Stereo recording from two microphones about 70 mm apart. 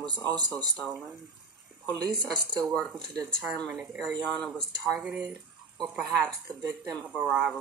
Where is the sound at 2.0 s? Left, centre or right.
Right.